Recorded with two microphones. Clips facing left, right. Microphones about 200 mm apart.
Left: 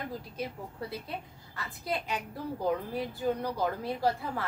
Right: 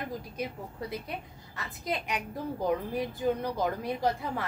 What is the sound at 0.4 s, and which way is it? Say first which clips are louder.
A woman's voice: even; 15° right (ahead or behind).